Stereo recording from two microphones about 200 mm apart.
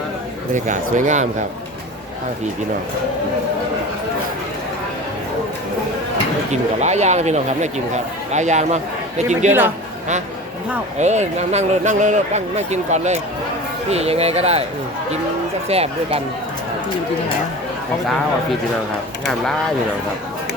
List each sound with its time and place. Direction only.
0.5 s speech: 40° right (ahead or behind)
6.5 s speech: 35° right (ahead or behind)
10.9 s speech: 35° right (ahead or behind)
15.7 s speech: 30° right (ahead or behind)